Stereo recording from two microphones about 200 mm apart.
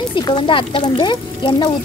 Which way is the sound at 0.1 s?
25° left (ahead or behind).